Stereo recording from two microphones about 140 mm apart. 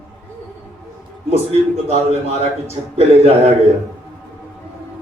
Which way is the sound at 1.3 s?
45° right (ahead or behind).